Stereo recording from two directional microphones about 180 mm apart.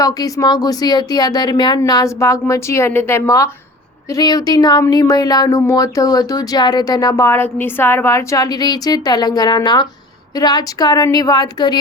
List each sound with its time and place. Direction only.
0.0 s speech: 20° left (ahead or behind)